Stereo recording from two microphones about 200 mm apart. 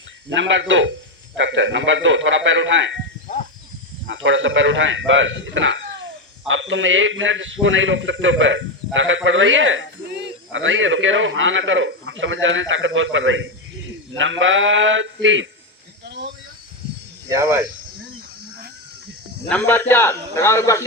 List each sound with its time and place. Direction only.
0.3 s a man's voice: 70° right (ahead or behind)
4.0 s a man's voice: 70° right (ahead or behind)
16.0 s a sound: 60° right (ahead or behind)
17.2 s speech: 15° right (ahead or behind)
19.5 s a man's voice: 10° left (ahead or behind)